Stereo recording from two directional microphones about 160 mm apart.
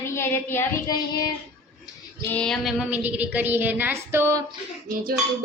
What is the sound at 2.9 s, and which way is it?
A woman's voice, 10° right (ahead or behind).